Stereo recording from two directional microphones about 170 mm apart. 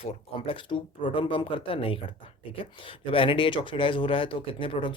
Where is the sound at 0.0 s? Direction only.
35° left (ahead or behind).